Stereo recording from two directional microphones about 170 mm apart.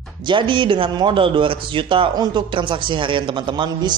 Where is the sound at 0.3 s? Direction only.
30° right (ahead or behind).